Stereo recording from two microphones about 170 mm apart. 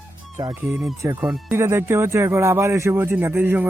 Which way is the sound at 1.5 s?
15° right (ahead or behind).